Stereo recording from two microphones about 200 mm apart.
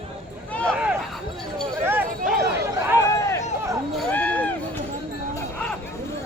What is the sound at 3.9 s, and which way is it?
Run, 10° left (ahead or behind).